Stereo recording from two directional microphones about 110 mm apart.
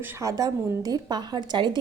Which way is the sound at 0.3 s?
35° right (ahead or behind).